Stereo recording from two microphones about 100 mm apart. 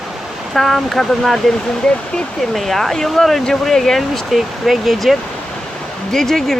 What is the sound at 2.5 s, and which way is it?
Speech, centre (ahead or behind).